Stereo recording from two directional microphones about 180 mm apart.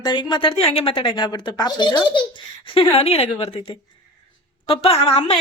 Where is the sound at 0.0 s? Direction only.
25° left (ahead or behind).